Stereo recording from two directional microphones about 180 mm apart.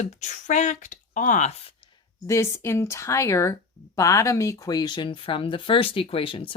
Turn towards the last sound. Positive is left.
turn(degrees=30)  # may be behind; listen again after turning